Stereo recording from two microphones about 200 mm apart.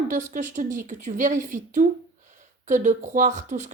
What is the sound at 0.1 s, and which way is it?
Speech, 40° right (ahead or behind).